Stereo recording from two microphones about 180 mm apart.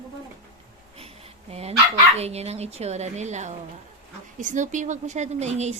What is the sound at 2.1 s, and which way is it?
A woman's voice, 35° right (ahead or behind).